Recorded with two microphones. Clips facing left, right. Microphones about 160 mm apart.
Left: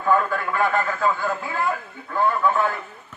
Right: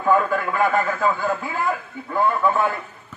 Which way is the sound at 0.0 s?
15° right (ahead or behind).